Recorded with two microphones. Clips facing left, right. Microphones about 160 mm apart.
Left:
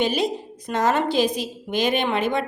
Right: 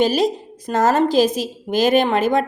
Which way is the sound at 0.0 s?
40° right (ahead or behind).